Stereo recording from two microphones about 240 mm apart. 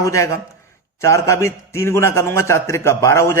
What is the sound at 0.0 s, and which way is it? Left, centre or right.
A man's voice, centre.